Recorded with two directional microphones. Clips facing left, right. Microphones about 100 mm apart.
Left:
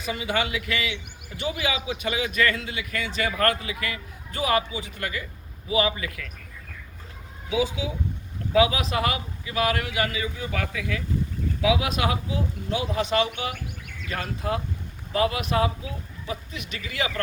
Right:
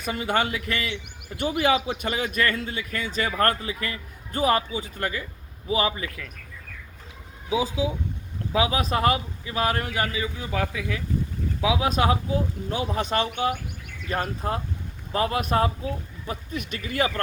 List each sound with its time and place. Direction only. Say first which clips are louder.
0.0 s a man's voice: right 2 dB; 45° right (ahead or behind)
8.5 s a man's voice: left 2 dB; 35° right (ahead or behind)